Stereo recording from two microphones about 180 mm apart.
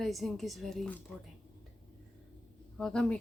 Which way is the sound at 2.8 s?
5° left (ahead or behind).